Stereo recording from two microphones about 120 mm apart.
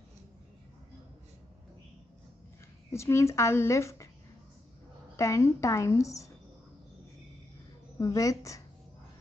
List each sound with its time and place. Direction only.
2.9 s a woman's voice: 25° left (ahead or behind)
5.1 s a woman's voice: 25° left (ahead or behind)
8.0 s a woman's voice: 30° left (ahead or behind)